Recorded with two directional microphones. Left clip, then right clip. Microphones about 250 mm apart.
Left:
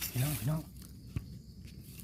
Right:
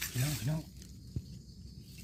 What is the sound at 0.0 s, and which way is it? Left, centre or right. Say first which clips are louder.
Speech: right 1 dB; centre.